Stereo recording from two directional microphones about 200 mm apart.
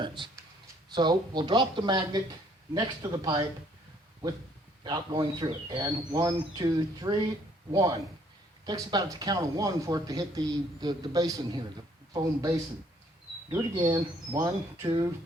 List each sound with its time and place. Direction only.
0.0 s a sound: 25° right (ahead or behind)
0.9 s speech: 20° right (ahead or behind)
4.8 s speech: 20° right (ahead or behind)